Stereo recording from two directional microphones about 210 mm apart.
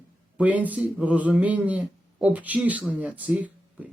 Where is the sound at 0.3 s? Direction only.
5° right (ahead or behind).